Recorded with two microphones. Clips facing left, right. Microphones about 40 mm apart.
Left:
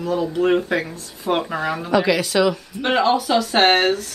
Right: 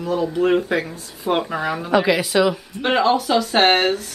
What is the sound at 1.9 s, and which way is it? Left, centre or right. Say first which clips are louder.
Speech: right 1 dB; centre.